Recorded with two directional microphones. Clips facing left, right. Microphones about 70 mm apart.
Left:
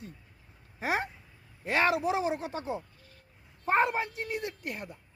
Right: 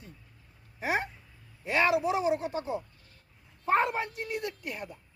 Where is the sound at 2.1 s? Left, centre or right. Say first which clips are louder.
Right 2 dB; left.